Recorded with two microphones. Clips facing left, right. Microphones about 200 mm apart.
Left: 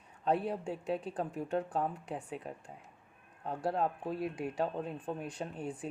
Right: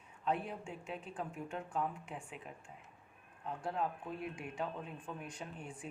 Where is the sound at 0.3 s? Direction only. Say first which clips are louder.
Left 6 dB; 35° left (ahead or behind).